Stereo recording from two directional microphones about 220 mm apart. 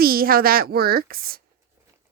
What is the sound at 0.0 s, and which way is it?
A woman's voice, 40° right (ahead or behind).